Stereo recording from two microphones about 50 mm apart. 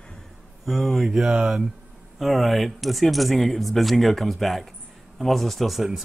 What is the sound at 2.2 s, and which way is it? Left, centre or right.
Speech, centre.